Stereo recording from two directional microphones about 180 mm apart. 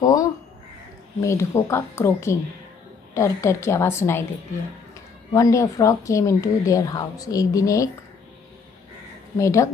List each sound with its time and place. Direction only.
0.0 s a woman's voice: 20° left (ahead or behind)
5.3 s a woman's voice: 20° left (ahead or behind)
9.4 s speech: 15° left (ahead or behind)